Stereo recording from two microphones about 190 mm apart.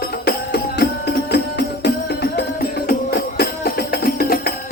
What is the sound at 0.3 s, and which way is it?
Music, 60° left (ahead or behind).